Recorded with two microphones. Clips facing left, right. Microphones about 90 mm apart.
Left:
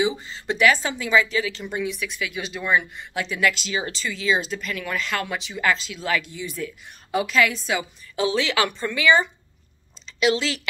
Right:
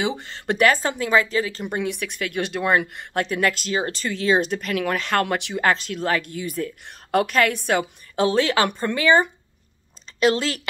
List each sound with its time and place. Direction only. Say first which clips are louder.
0.2 s speech: right 1 dB; 55° right (ahead or behind)
1.8 s speech: right 1 dB; 65° right (ahead or behind); by 3.1 s 80° right
3.1 s speech: right 1 dB; 50° right (ahead or behind)